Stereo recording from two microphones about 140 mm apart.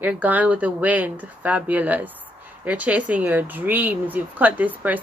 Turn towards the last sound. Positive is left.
turn(degrees=-10)  # may be behind; listen again after turning